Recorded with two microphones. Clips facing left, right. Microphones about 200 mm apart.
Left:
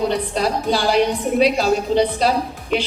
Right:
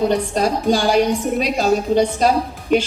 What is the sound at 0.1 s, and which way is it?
A woman's voice, 45° right (ahead or behind).